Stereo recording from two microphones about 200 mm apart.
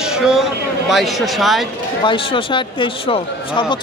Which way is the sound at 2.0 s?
25° left (ahead or behind).